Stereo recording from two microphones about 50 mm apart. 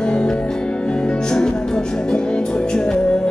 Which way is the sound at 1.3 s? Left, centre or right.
Centre.